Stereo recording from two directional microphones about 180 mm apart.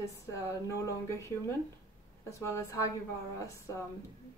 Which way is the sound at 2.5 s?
15° left (ahead or behind).